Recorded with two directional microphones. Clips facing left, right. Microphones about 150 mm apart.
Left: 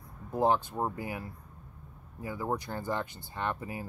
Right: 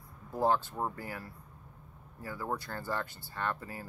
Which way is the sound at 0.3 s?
20° left (ahead or behind).